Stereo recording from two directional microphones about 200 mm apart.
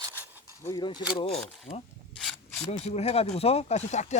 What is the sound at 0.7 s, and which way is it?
Speech, 20° left (ahead or behind).